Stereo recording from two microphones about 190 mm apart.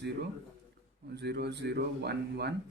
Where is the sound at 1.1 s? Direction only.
60° right (ahead or behind).